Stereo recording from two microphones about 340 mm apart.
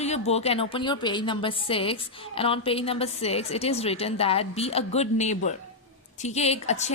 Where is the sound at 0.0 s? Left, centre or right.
Centre.